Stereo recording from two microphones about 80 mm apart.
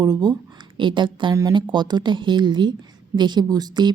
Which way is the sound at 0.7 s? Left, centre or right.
Right.